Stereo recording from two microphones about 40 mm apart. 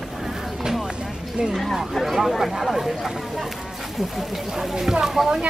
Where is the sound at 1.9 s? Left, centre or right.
Centre.